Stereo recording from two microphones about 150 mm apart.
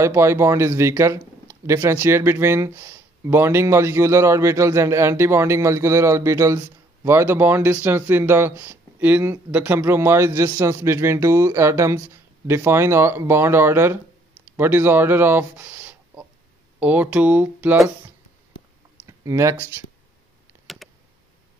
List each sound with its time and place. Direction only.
0.0 s speech: 20° right (ahead or behind)
19.0 s speech: 20° right (ahead or behind)
20.6 s a sound: centre (ahead or behind)